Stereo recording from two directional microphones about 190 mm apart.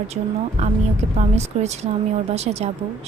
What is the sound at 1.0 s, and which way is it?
A woman's voice, 40° right (ahead or behind).